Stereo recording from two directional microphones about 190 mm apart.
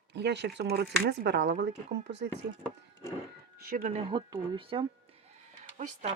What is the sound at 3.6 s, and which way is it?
Speech, 50° right (ahead or behind).